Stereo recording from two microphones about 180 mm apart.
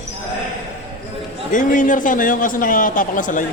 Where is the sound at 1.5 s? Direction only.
45° left (ahead or behind).